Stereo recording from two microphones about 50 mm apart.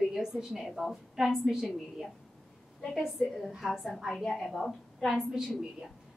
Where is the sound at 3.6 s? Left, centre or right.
Centre.